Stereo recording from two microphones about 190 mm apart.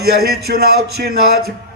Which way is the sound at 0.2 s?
55° right (ahead or behind).